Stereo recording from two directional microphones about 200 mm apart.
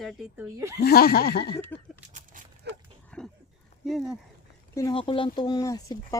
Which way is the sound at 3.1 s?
5° left (ahead or behind).